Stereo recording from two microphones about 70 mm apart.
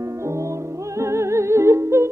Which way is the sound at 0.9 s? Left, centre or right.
Right.